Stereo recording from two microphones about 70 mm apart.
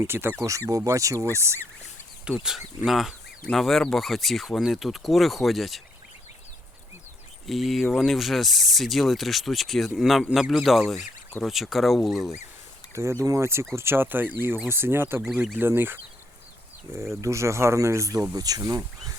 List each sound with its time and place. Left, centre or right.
0.1 s speech: right
0.9 s speech: right
2.4 s speech: centre
7.4 s speech: centre
12.9 s speech: right
17.0 s speech: right
18.3 s speech: right